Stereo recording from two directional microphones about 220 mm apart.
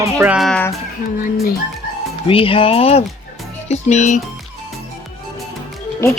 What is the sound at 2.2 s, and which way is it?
Speech, 25° left (ahead or behind).